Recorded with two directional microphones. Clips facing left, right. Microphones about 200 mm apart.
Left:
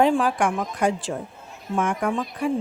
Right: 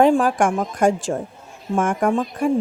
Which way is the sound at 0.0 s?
50° right (ahead or behind).